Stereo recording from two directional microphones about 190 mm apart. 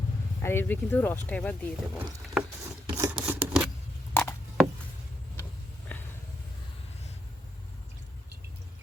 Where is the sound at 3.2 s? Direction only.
5° right (ahead or behind).